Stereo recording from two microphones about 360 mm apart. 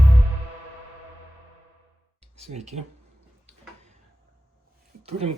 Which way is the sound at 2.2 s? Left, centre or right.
Centre.